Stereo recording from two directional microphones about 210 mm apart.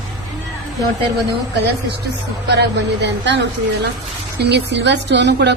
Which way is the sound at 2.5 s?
55° right (ahead or behind).